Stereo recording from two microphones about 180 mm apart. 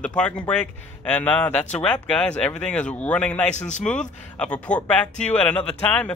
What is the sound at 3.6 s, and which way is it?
Speech, 40° left (ahead or behind).